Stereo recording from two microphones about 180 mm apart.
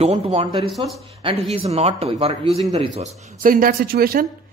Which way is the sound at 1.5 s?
35° right (ahead or behind).